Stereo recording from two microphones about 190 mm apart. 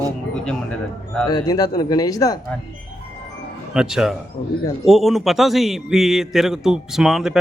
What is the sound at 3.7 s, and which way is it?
A man's voice, 5° right (ahead or behind).